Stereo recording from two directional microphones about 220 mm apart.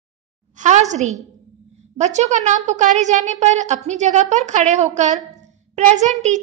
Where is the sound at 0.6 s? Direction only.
35° right (ahead or behind).